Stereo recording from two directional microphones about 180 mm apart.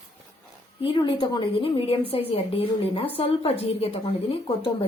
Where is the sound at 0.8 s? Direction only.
25° left (ahead or behind).